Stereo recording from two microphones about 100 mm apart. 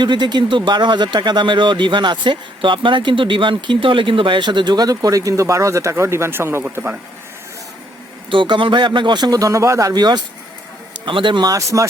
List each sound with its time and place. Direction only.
0.0 s speech: 50° right (ahead or behind); by 6.9 s 25° right (ahead or behind)
8.3 s speech: 55° right (ahead or behind)
11.0 s a man's voice: 55° right (ahead or behind)
11.4 s speech: 35° right (ahead or behind)